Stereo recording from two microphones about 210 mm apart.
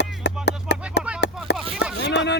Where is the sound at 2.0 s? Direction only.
55° left (ahead or behind).